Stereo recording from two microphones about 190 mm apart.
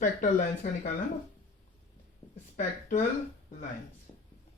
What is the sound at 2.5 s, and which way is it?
Speech, 45° left (ahead or behind).